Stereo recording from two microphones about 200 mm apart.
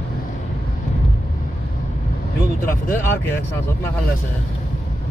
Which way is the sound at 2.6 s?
10° left (ahead or behind).